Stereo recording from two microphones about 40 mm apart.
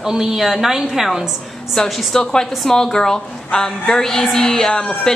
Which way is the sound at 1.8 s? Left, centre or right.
Centre.